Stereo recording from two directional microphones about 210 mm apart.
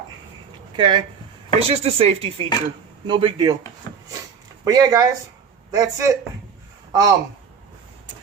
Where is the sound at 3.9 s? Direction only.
20° left (ahead or behind).